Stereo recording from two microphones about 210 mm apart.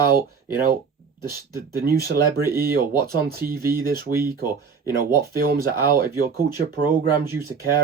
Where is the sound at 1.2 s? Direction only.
45° right (ahead or behind).